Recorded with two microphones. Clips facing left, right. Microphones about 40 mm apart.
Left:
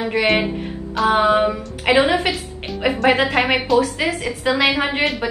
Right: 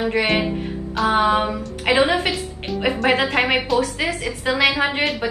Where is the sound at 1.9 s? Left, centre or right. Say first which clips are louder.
Left 2 dB; left.